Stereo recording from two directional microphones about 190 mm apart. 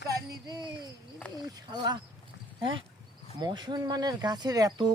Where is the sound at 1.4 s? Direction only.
20° right (ahead or behind).